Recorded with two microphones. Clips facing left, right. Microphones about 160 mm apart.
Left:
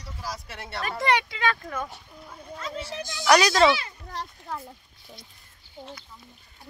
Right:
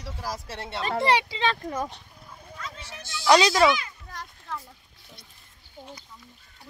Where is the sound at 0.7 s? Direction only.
25° right (ahead or behind).